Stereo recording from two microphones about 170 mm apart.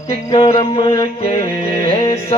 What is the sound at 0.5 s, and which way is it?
Speech, 30° left (ahead or behind).